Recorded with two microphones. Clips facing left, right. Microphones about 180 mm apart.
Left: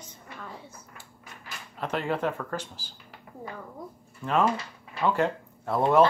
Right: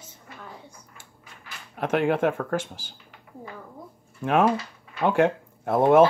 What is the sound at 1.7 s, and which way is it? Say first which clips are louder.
Speech: right 6 dB; 55° right (ahead or behind).